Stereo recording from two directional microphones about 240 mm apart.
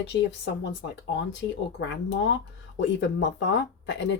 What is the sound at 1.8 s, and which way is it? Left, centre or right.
Speech, left.